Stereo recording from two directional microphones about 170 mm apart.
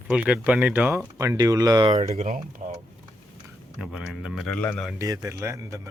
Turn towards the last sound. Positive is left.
turn(degrees=-15)  # may be behind; listen again after turning